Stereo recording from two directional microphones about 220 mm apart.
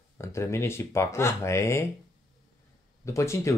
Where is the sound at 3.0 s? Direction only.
15° left (ahead or behind).